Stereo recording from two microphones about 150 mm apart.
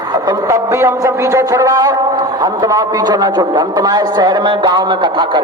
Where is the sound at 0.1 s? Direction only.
25° right (ahead or behind).